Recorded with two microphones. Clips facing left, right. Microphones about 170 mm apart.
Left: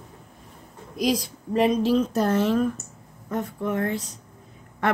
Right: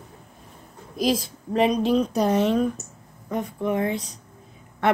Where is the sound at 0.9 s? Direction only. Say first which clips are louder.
Right 1 dB; 25° right (ahead or behind).